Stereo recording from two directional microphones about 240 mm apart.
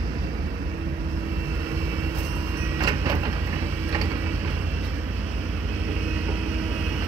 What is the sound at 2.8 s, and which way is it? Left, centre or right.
Vehicle, centre.